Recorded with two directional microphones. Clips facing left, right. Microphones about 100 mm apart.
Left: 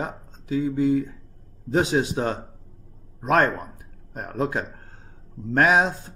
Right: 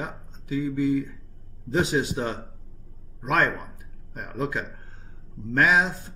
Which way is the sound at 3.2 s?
30° left (ahead or behind).